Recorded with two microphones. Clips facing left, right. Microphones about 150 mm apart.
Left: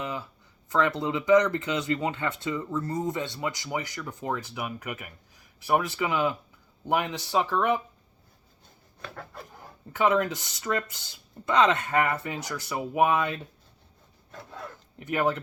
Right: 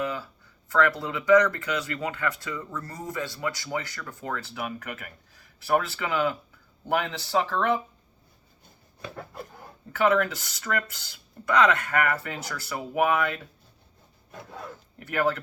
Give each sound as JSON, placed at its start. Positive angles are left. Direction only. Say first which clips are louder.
{"t": 0.0, "sound": "a sound", "louder": "right 3 dB", "side_deg": 20}
{"t": 0.7, "sound": "speech", "louder": "right 1 dB", "side_deg": 20}
{"t": 9.9, "sound": "speech", "louder": "right 1 dB", "side_deg": 20}
{"t": 14.9, "sound": "speech", "louder": "even", "side_deg": 20}